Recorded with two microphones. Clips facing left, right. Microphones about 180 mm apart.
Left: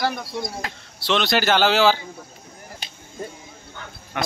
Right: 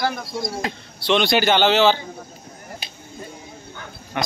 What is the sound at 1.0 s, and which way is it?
Speech, centre (ahead or behind).